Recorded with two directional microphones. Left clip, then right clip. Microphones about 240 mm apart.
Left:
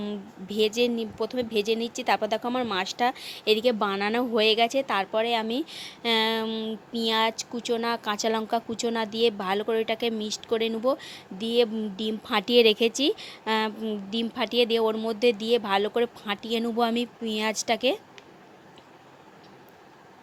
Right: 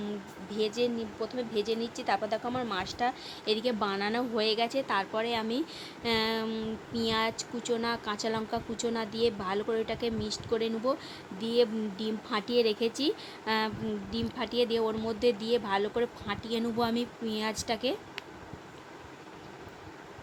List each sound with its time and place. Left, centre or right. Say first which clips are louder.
0.5 s speech: left 6 dB; left